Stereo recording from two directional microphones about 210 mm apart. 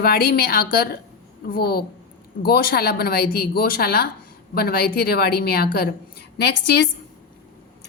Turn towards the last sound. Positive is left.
turn(degrees=50)  # may be behind; listen again after turning